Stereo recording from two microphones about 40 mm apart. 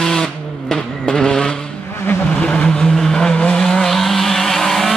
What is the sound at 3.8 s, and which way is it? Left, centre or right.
Vehicle, centre.